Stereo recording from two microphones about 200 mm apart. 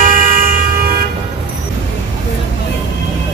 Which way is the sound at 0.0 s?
40° right (ahead or behind).